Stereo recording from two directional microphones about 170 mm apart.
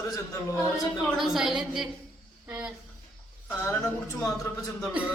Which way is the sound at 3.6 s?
20° left (ahead or behind).